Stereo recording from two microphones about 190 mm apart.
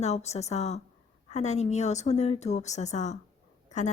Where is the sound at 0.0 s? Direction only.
35° left (ahead or behind).